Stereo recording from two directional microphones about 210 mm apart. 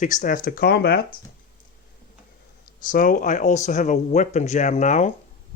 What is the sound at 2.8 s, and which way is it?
Speech, 40° left (ahead or behind).